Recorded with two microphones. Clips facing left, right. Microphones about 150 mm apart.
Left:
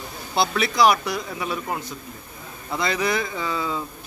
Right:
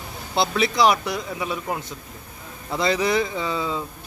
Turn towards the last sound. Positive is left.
turn(degrees=-25)  # may be behind; listen again after turning